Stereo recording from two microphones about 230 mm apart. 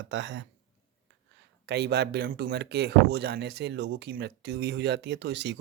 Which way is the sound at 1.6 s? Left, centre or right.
Right.